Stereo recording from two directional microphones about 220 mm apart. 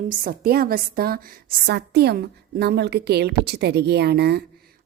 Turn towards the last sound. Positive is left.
turn(degrees=-45)  # may be behind; listen again after turning